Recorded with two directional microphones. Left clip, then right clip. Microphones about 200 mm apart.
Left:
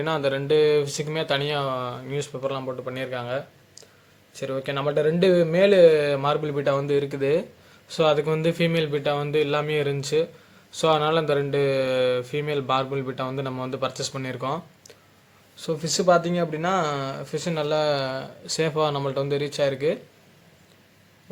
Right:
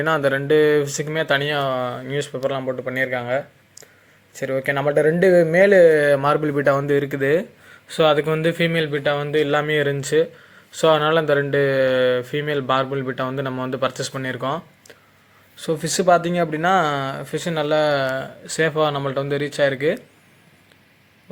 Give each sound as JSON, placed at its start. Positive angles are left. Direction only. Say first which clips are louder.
{"t": 0.0, "sound": "speech", "louder": "right 5 dB", "side_deg": -15}
{"t": 15.6, "sound": "speech", "louder": "right 3 dB", "side_deg": -20}